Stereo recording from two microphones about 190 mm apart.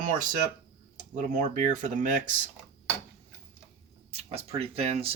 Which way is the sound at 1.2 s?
45° right (ahead or behind).